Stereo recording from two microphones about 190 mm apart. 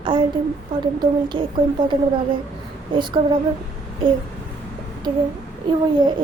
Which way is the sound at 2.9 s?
25° right (ahead or behind).